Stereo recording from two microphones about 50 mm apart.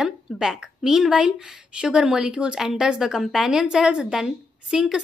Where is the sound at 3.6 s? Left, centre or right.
Centre.